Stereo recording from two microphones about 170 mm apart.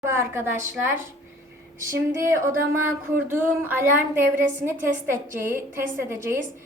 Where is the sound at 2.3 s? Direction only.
15° right (ahead or behind).